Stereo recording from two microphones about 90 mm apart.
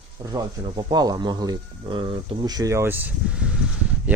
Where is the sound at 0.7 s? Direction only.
55° right (ahead or behind).